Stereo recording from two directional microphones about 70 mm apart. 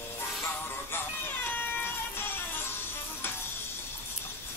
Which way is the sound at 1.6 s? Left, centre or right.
Left.